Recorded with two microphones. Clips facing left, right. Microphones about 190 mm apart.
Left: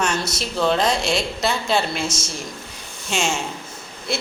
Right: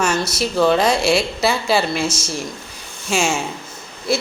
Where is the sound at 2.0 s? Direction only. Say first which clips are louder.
Right 4 dB; 25° left (ahead or behind).